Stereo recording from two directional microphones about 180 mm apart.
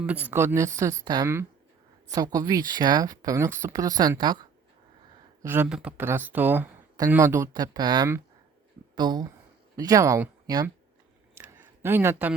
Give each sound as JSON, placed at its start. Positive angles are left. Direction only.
{"t": 0.0, "sound": "speech", "side_deg": -10}
{"t": 5.4, "sound": "speech", "side_deg": -10}
{"t": 11.3, "sound": "a sound", "side_deg": -10}